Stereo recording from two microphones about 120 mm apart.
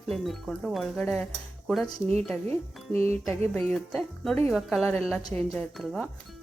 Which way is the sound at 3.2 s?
25° left (ahead or behind).